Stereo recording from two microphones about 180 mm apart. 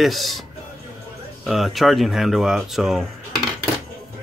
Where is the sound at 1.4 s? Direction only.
Centre (ahead or behind).